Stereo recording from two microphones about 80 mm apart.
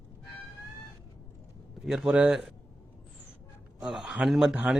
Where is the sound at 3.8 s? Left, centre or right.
Centre.